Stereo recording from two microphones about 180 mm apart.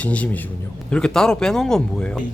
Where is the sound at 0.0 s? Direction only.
10° left (ahead or behind).